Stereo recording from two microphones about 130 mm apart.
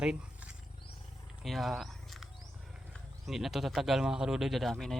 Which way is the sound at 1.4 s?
Centre (ahead or behind).